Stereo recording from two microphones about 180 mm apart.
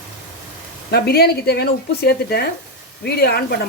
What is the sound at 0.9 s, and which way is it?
Speech, 60° left (ahead or behind).